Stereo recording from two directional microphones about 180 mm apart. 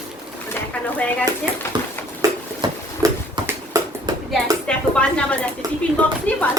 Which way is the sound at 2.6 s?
20° right (ahead or behind).